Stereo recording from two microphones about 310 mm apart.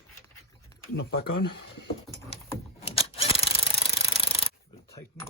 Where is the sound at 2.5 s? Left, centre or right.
Centre.